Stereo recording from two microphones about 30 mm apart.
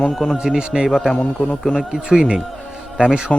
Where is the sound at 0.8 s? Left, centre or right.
Centre.